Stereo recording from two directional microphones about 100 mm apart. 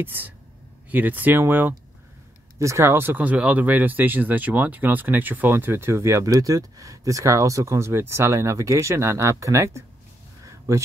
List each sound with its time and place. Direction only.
0.0 s speech: 20° right (ahead or behind)